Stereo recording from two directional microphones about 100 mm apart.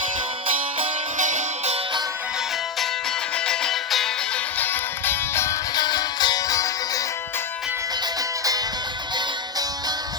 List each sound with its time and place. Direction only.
3.3 s music: 5° left (ahead or behind)
4.5 s music: 20° left (ahead or behind)
5.7 s music: 45° left (ahead or behind)